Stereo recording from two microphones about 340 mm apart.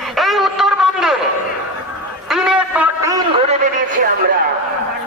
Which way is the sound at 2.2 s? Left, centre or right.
Centre.